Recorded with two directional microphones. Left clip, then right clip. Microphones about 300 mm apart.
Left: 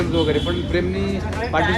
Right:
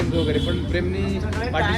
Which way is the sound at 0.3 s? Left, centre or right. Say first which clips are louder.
Left 3 dB; centre.